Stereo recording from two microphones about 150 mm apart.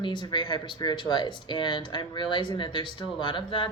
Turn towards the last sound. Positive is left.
turn(degrees=35)  # may be behind; listen again after turning